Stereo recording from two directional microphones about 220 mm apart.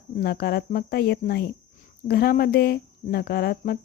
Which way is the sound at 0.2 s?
45° left (ahead or behind).